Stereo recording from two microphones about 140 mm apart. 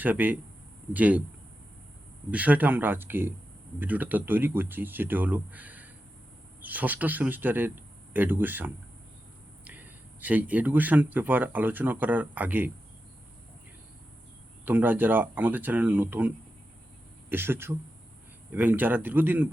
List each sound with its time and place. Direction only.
0.0 s speech: 10° right (ahead or behind)
2.3 s speech: 10° right (ahead or behind)
14.6 s speech: 15° right (ahead or behind)